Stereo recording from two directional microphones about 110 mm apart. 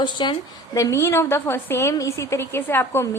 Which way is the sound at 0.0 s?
45° left (ahead or behind).